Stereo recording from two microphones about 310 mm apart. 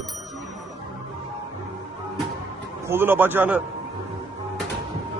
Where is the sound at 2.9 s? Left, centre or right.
Centre.